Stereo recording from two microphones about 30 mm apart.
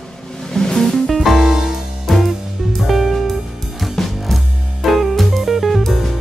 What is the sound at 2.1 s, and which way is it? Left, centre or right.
Music, centre.